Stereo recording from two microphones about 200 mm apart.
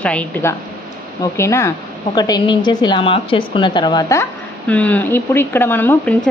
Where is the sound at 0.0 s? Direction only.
5° left (ahead or behind).